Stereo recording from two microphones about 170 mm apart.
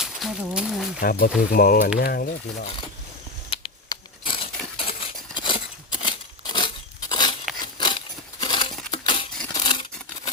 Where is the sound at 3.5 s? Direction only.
30° left (ahead or behind).